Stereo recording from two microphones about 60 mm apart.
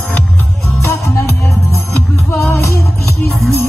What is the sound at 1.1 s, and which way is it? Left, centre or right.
Music, left.